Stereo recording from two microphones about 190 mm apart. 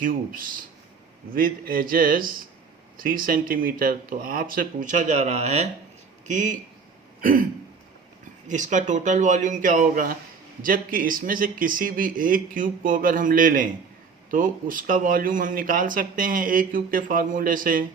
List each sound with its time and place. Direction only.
0.0 s speech: 45° right (ahead or behind)
7.2 s throat clearing: 45° right (ahead or behind)
8.4 s speech: 40° right (ahead or behind)